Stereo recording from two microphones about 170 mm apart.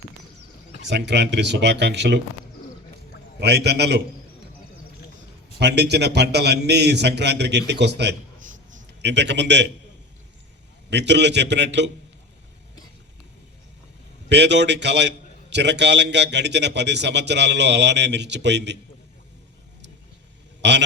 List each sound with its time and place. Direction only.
0.8 s a man's voice: 90° right
3.4 s a man's voice: 80° right
5.5 s a man's voice: 75° right (ahead or behind)
10.8 s a man's voice: 90° right
14.3 s a man's voice: 90° right
20.6 s a man's voice: 90° right